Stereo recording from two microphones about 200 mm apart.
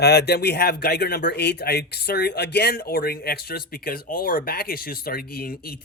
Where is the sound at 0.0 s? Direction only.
55° left (ahead or behind).